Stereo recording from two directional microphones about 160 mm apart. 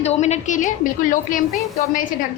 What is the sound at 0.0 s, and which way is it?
A woman's voice, 45° left (ahead or behind).